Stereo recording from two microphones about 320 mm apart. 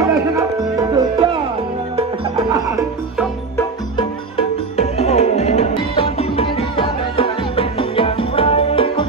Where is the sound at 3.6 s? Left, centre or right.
Centre.